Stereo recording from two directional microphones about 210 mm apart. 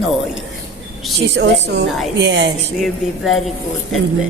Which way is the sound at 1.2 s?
55° right (ahead or behind).